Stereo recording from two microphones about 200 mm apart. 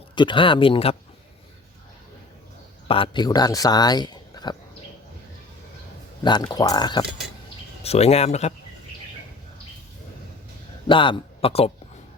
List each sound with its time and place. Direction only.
0.2 s speech: 25° left (ahead or behind)
2.8 s speech: 25° left (ahead or behind)
6.2 s speech: 20° left (ahead or behind)
7.8 s speech: 30° left (ahead or behind)
10.8 s speech: 25° left (ahead or behind)